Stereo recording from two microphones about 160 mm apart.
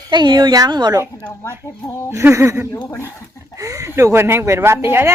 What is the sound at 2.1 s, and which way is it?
Speech, 15° right (ahead or behind).